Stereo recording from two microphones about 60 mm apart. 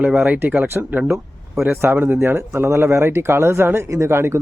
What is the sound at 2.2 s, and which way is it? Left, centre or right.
Speech, right.